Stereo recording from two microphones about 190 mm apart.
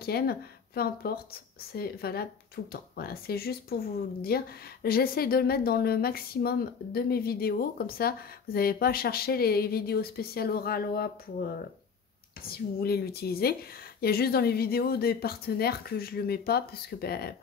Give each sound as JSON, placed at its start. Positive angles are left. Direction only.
{"t": 0.0, "sound": "a woman's voice", "side_deg": 55}